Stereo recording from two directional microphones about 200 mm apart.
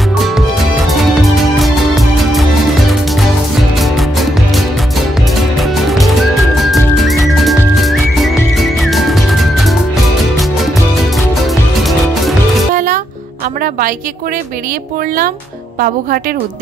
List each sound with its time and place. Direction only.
0.7 s music: centre (ahead or behind)
3.8 s music: centre (ahead or behind)
11.1 s music: centre (ahead or behind)
12.7 s music: 40° right (ahead or behind)
13.6 s a sound: 45° right (ahead or behind)
15.8 s a woman's voice: 45° right (ahead or behind)